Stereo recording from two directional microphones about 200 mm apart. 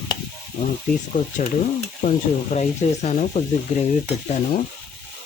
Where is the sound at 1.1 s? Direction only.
40° left (ahead or behind).